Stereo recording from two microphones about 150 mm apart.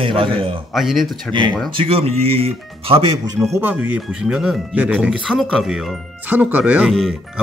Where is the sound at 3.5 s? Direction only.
10° right (ahead or behind).